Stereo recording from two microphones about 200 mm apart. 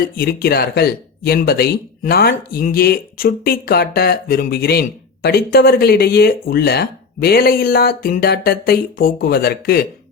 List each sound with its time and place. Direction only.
0.2 s speech: 50° left (ahead or behind)